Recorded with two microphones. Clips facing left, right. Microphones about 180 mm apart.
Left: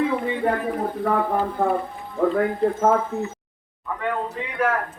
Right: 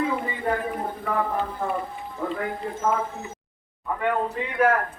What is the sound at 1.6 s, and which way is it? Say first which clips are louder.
Speech: left 10 dB; 60° left (ahead or behind).